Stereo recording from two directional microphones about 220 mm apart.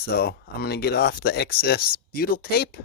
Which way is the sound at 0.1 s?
45° left (ahead or behind).